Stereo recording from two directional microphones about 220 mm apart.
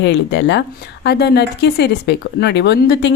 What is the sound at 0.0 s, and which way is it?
Speech, 55° left (ahead or behind).